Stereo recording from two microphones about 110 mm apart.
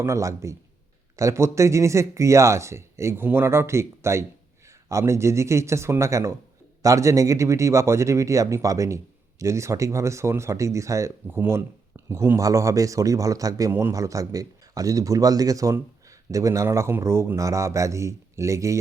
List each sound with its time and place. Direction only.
0.0 s speech: 25° right (ahead or behind)